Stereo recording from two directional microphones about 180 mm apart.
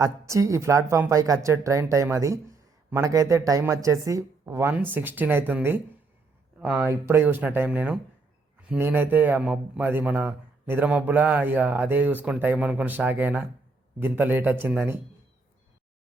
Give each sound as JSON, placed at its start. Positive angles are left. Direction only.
{"t": 0.0, "sound": "a man's voice", "side_deg": -15}